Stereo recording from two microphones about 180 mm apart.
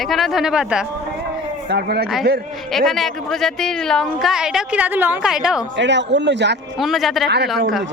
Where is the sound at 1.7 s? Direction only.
60° right (ahead or behind).